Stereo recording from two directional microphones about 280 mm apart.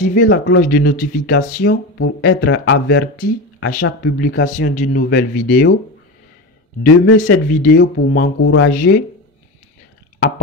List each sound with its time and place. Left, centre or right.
0.0 s speech: left
4.5 s speech: left
6.8 s speech: left